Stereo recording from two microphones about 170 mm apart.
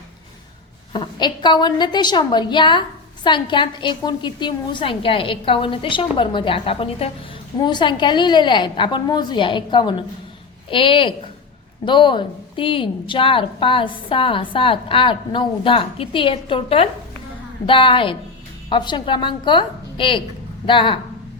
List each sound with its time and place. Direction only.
0.9 s a woman's voice: 25° left (ahead or behind)